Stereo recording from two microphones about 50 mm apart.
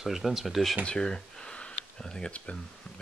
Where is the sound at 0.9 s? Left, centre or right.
Centre.